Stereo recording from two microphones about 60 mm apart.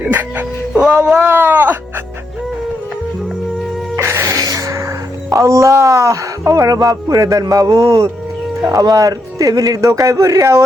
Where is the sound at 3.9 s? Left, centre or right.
Right.